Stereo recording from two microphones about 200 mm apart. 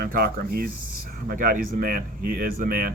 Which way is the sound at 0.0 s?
50° right (ahead or behind).